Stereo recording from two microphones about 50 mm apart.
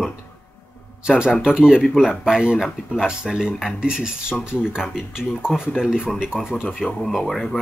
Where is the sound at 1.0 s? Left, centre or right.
Centre.